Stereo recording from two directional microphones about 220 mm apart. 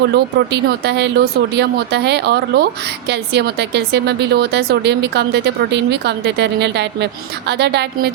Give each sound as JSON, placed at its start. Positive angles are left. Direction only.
{"t": 0.1, "sound": "a woman's voice", "side_deg": -50}